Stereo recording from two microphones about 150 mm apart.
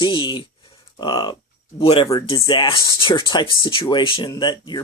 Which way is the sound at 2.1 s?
25° left (ahead or behind).